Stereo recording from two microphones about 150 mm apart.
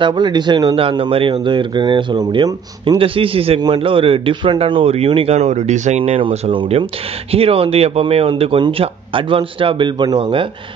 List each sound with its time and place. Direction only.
0.0 s speech: 30° right (ahead or behind)